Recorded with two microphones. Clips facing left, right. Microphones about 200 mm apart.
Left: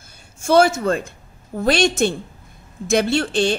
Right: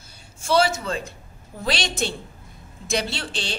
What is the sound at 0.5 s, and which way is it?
A woman's voice, 50° left (ahead or behind).